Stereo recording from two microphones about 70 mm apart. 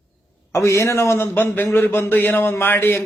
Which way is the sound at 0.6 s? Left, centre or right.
Left.